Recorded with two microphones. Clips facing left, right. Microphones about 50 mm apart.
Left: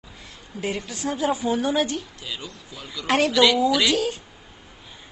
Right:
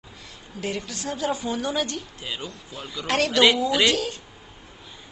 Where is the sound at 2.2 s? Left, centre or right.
Right.